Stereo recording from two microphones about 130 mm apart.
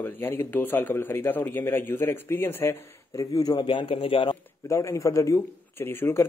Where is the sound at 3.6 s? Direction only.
40° left (ahead or behind).